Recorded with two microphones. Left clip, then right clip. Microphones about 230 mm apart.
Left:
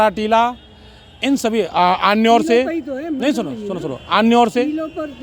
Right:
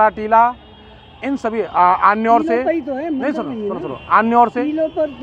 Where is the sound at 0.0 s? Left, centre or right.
Left.